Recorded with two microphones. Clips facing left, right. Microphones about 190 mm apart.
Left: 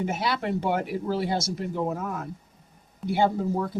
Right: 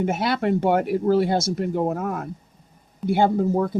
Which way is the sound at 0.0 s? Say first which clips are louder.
Right 5 dB; 55° right (ahead or behind).